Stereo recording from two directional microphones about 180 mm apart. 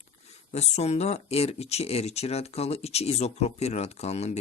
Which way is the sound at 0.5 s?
40° left (ahead or behind).